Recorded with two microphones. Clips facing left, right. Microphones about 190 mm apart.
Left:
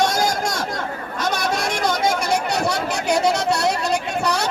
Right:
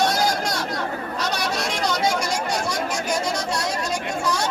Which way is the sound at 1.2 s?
50° left (ahead or behind).